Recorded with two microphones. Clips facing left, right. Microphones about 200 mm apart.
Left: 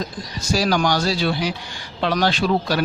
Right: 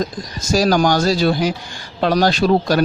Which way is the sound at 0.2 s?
45° right (ahead or behind).